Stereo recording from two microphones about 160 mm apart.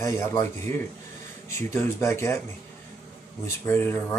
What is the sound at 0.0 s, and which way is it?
A man's voice, 20° left (ahead or behind).